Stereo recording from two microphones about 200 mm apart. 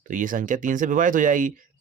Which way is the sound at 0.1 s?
40° right (ahead or behind).